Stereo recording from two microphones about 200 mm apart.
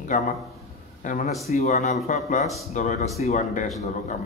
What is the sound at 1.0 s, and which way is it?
Speech, 40° left (ahead or behind).